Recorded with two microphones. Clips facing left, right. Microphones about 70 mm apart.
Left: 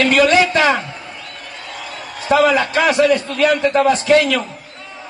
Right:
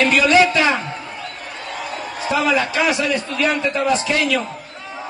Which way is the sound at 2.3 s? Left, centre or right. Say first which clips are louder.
Left 7 dB; left.